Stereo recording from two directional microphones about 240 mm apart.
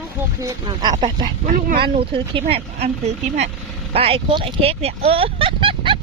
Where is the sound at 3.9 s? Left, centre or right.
Right.